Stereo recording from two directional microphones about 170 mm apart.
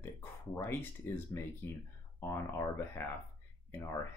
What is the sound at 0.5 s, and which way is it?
Speech, 15° left (ahead or behind).